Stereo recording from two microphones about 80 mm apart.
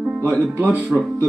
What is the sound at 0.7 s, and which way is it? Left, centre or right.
Speech, centre.